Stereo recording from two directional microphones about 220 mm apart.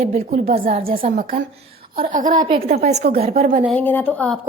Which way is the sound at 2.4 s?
25° right (ahead or behind).